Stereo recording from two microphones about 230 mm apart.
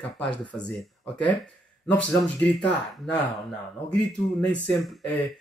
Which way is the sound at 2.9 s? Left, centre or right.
Centre.